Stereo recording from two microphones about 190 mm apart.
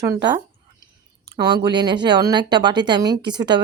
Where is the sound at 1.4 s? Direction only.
25° right (ahead or behind).